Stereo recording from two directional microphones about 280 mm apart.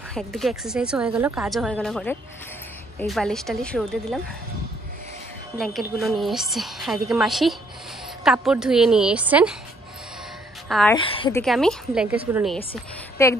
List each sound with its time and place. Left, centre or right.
0.1 s a woman's voice: centre
5.6 s a woman's voice: centre
10.7 s a woman's voice: centre
11.0 s a woman's voice: centre
11.4 s a woman's voice: centre
13.2 s a woman's voice: centre